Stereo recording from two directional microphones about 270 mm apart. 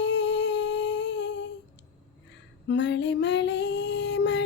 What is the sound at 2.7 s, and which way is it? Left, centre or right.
Female singing, left.